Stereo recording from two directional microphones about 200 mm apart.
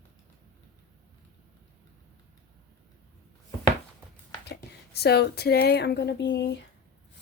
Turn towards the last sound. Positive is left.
turn(degrees=60)  # may be behind; listen again after turning